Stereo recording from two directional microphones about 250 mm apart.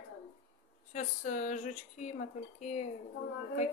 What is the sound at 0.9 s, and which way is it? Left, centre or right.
Speech, left.